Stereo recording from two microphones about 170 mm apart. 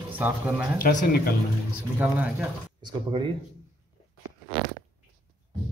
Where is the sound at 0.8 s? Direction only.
55° left (ahead or behind).